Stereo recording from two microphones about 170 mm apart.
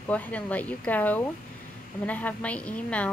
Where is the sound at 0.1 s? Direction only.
10° left (ahead or behind).